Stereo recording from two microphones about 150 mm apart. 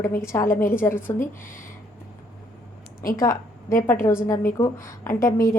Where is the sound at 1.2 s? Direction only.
65° left (ahead or behind).